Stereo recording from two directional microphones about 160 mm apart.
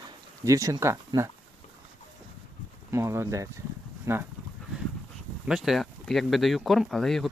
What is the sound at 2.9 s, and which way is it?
Speech, 15° right (ahead or behind).